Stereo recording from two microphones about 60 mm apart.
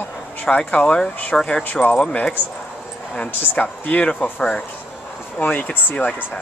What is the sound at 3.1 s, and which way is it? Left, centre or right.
Speech, left.